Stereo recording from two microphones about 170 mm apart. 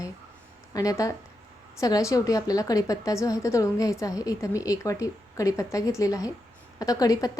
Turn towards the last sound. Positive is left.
turn(degrees=20)  # may be behind; listen again after turning